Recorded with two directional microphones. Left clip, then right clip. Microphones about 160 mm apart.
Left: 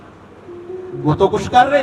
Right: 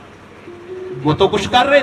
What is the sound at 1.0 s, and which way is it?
Speech, 15° right (ahead or behind).